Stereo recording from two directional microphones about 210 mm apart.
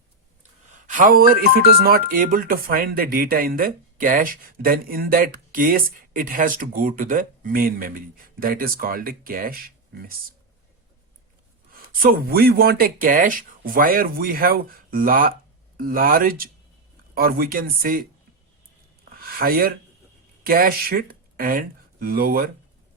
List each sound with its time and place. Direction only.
0.9 s speech: 40° right (ahead or behind)
11.7 s speech: 45° right (ahead or behind)
19.1 s a sound: 45° right (ahead or behind)
20.4 s speech: 45° right (ahead or behind)